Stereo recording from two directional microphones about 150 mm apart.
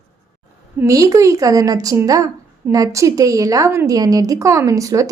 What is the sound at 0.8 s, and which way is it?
A woman's voice, 20° right (ahead or behind).